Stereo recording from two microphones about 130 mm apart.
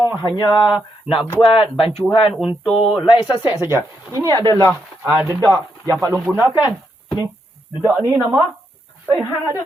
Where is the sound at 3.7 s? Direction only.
15° right (ahead or behind).